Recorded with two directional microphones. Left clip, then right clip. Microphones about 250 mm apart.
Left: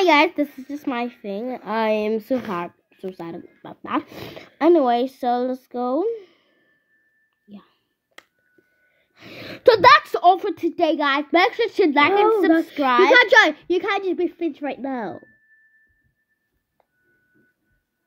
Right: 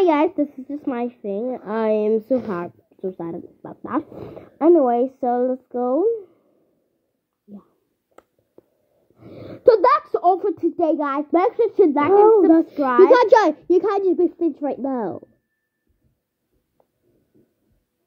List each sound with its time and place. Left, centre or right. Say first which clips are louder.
0.0 s a child's voice: left 1 dB; centre
9.1 s a child's voice: left 2 dB; left
13.2 s a child's voice: even; centre
14.8 s a child's voice: right 3 dB; centre